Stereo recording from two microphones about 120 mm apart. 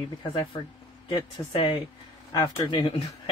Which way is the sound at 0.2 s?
45° left (ahead or behind).